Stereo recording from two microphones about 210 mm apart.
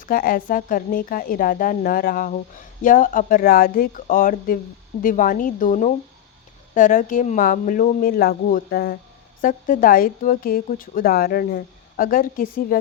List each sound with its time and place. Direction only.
0.0 s a woman's voice: 40° left (ahead or behind)